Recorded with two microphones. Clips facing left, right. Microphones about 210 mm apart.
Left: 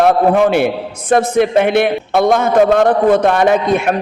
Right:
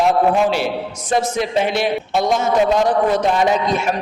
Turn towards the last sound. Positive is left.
turn(degrees=55)  # may be behind; listen again after turning